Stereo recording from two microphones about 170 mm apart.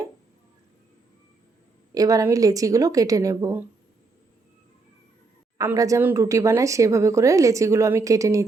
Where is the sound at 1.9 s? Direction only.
20° right (ahead or behind).